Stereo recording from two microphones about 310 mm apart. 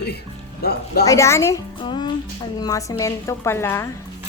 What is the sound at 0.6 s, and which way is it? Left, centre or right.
Speech, left.